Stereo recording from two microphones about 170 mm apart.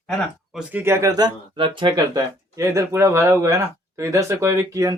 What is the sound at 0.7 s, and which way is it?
Speech, 15° right (ahead or behind).